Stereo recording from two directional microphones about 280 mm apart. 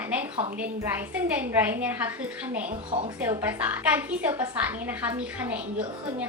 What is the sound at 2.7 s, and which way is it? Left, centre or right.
Speech, centre.